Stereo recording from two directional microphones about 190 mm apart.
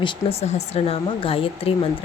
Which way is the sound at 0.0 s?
30° left (ahead or behind).